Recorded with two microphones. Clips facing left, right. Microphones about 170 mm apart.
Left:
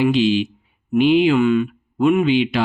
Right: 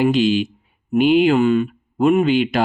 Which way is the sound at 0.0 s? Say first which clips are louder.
Even; 45° right (ahead or behind).